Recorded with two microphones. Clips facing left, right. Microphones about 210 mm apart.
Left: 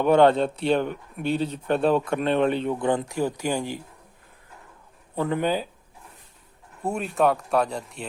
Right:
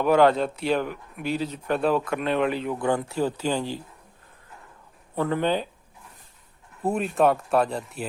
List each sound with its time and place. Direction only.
0.1 s speech: 25° left (ahead or behind)
5.1 s speech: 15° left (ahead or behind)
6.8 s speech: centre (ahead or behind)